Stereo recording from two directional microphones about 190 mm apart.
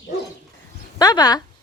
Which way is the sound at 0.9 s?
20° left (ahead or behind).